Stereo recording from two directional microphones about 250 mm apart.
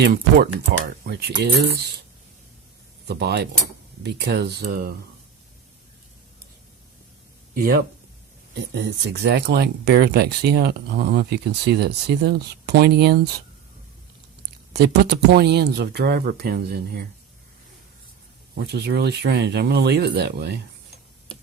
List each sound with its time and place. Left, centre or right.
0.0 s speech: right
3.1 s speech: right
7.5 s speech: right
14.7 s speech: right
18.5 s speech: right